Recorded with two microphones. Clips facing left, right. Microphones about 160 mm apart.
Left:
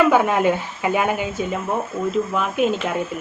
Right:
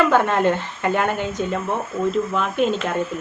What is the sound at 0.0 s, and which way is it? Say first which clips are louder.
A woman's voice: left 1 dB; 10° left (ahead or behind).